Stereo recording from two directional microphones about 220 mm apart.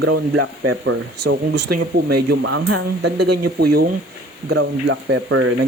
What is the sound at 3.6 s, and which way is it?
Speech, 45° right (ahead or behind).